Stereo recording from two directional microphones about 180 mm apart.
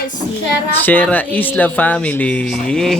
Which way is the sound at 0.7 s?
10° left (ahead or behind).